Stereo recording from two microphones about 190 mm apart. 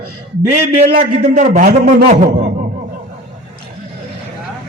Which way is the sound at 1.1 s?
40° right (ahead or behind).